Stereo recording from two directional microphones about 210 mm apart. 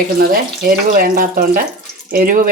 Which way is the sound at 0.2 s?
45° right (ahead or behind).